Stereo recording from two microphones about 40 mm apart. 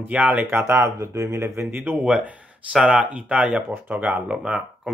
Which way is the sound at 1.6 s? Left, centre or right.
Right.